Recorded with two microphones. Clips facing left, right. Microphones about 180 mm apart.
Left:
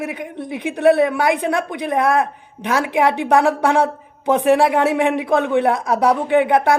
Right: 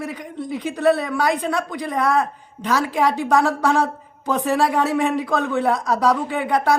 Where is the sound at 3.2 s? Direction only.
15° left (ahead or behind).